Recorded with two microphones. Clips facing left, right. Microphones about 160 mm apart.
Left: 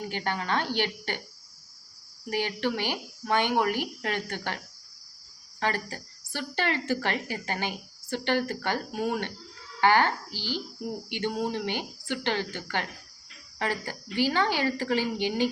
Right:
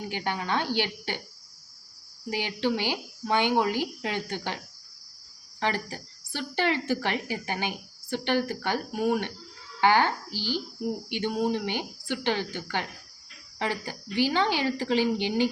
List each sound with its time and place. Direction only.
0.1 s speech: 15° right (ahead or behind)
2.3 s speech: 15° right (ahead or behind)
10.3 s speech: 15° left (ahead or behind)
10.8 s speech: 15° right (ahead or behind)